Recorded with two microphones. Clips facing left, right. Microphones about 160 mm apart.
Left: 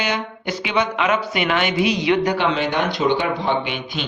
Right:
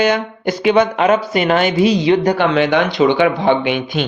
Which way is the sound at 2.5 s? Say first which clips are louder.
Right 7 dB; 75° right (ahead or behind).